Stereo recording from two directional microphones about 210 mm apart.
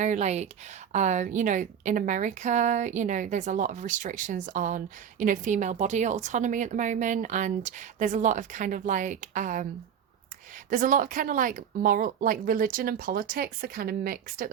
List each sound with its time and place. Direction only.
0.0 s a woman's voice: 35° right (ahead or behind)
10.7 s speech: 40° right (ahead or behind)